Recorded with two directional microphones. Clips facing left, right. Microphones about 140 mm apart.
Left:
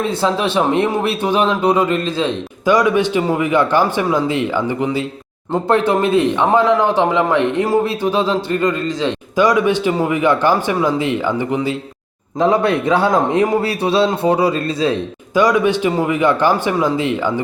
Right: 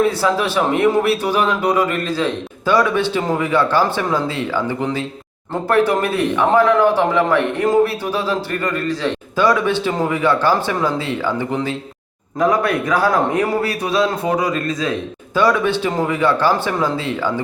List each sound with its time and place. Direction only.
0.2 s a man's voice: 25° left (ahead or behind)
12.4 s a man's voice: 25° left (ahead or behind)
15.4 s a man's voice: 15° left (ahead or behind)